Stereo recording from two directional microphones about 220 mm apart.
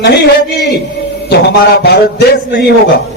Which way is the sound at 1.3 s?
45° left (ahead or behind).